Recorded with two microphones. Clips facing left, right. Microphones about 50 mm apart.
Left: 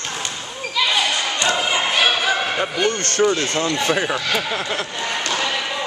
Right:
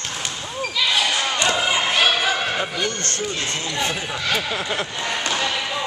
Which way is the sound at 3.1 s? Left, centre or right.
Left.